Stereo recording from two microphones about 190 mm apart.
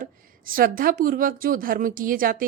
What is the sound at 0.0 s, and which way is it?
A woman's voice, 50° right (ahead or behind).